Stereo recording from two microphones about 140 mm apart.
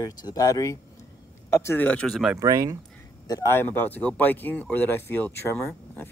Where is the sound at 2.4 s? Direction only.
25° right (ahead or behind).